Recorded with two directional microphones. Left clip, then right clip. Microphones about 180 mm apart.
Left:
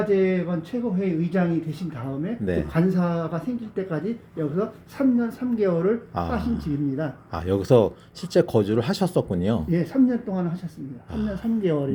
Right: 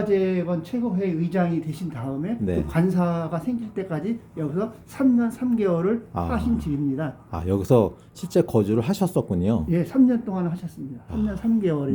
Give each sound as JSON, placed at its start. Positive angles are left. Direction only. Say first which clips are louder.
{"t": 0.1, "sound": "a woman's voice", "louder": "right 2 dB", "side_deg": -25}